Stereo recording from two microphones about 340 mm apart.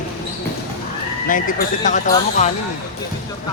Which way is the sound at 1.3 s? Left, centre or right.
Left.